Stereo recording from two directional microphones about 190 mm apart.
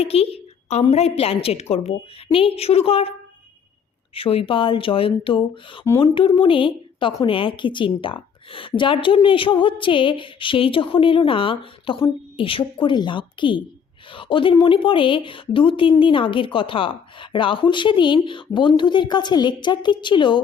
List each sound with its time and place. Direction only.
0.0 s a woman's voice: 30° left (ahead or behind)
4.1 s a woman's voice: 30° left (ahead or behind)